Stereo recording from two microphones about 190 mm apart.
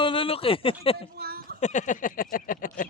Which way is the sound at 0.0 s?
30° left (ahead or behind).